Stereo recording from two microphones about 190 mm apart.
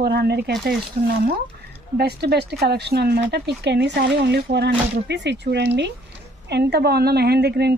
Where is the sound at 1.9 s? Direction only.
60° right (ahead or behind).